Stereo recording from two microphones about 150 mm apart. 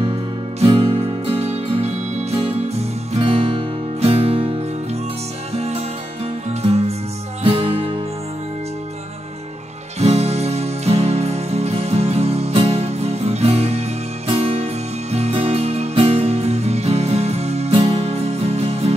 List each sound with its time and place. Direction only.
0.6 s music: 40° right (ahead or behind)
7.4 s music: 40° right (ahead or behind)
9.9 s music: 45° right (ahead or behind)